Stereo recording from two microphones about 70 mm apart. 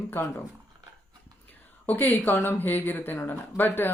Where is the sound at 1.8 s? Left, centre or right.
Left.